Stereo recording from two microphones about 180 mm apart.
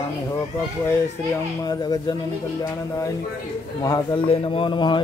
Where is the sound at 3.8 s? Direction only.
25° left (ahead or behind).